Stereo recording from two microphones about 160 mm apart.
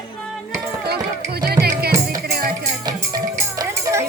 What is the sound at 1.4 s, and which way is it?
Music, 75° right (ahead or behind).